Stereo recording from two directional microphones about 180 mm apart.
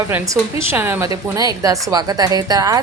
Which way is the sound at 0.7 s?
10° right (ahead or behind).